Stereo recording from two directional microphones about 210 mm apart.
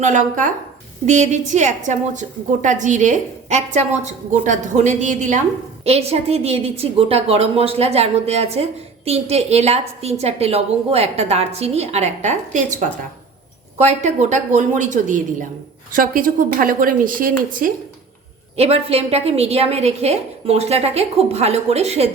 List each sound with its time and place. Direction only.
0.0 s a woman's voice: 35° right (ahead or behind)
18.5 s a woman's voice: 30° right (ahead or behind)